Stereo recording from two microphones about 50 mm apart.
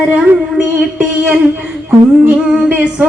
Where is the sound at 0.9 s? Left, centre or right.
Right.